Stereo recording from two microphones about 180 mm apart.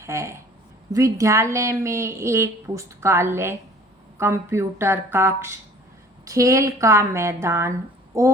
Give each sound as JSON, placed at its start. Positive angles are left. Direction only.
{"t": 0.0, "sound": "a woman's voice", "side_deg": -15}